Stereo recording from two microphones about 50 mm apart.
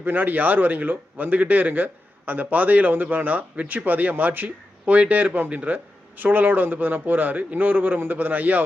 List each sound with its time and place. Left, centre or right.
0.0 s a man's voice: right